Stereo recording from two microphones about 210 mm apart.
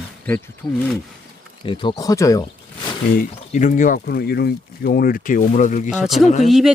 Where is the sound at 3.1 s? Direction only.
35° left (ahead or behind).